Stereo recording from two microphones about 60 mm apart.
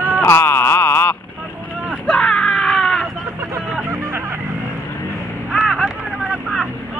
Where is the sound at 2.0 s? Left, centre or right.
Centre.